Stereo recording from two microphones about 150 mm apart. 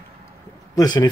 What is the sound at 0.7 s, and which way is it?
Speech, 25° left (ahead or behind).